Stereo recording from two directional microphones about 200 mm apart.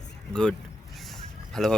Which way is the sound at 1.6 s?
Centre (ahead or behind).